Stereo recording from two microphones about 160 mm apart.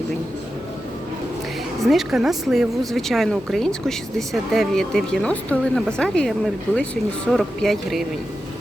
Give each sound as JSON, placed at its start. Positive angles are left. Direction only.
{"t": 1.8, "sound": "speech", "side_deg": 0}